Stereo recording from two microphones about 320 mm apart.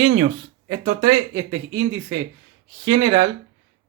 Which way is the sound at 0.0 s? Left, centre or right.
Centre.